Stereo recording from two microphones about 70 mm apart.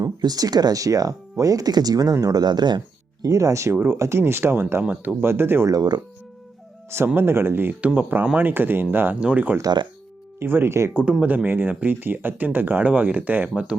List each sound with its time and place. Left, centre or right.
0.0 s speech: right
2.2 s speech: right
3.3 s speech: right
5.6 s speech: right
7.2 s speech: right
7.8 s speech: right
9.6 s speech: right
10.4 s speech: right
10.9 s speech: centre
11.4 s speech: right